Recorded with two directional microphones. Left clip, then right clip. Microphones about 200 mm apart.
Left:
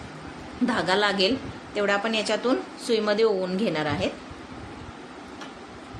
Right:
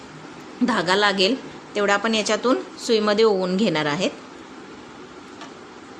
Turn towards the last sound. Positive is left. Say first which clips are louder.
# right 4 dB
turn(degrees=-30)  # may be behind; listen again after turning